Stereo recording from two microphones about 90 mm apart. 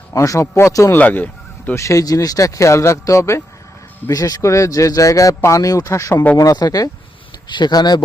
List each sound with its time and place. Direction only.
0.1 s speech: 35° left (ahead or behind)
0.9 s speech: 15° left (ahead or behind)
1.7 s speech: 35° left (ahead or behind)
4.1 s speech: 40° left (ahead or behind)
7.4 s speech: 55° left (ahead or behind)